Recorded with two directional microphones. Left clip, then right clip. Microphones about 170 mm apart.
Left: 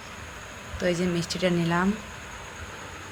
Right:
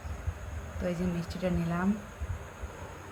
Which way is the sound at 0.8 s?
35° left (ahead or behind).